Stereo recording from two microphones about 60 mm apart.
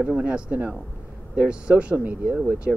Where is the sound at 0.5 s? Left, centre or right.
Right.